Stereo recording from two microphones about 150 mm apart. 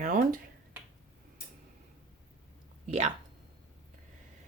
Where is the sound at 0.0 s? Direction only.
65° right (ahead or behind).